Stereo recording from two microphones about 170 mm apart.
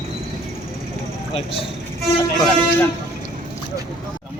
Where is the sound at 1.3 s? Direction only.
35° left (ahead or behind).